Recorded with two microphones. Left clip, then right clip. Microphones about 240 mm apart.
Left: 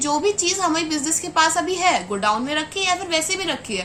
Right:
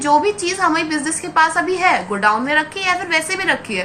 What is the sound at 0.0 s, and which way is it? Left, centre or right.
A woman's voice, left.